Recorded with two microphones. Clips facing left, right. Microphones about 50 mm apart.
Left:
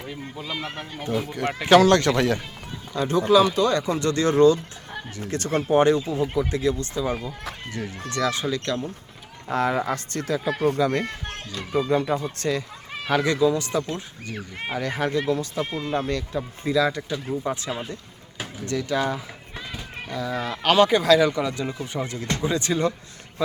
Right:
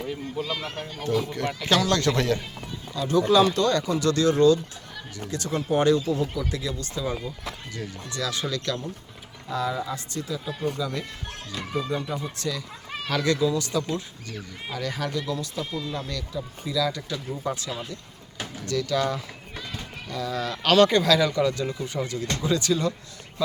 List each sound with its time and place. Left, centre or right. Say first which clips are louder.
0.1 s speech: right 1 dB; centre
1.5 s speech: left 9 dB; left
3.2 s speech: left 3 dB; centre
3.8 s speech: even; left
5.6 s speech: left 2 dB; left
8.3 s speech: left 3 dB; left
9.5 s speech: left 5 dB; left
12.4 s speech: left 5 dB; left
13.1 s speech: left 3 dB; left